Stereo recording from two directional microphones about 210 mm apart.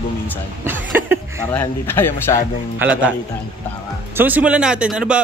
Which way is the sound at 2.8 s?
5° right (ahead or behind).